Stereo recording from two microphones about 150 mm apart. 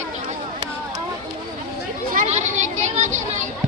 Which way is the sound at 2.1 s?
50° right (ahead or behind).